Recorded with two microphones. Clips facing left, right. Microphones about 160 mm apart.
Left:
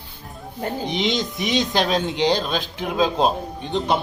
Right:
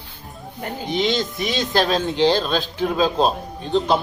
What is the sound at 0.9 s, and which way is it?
Speech, 20° left (ahead or behind).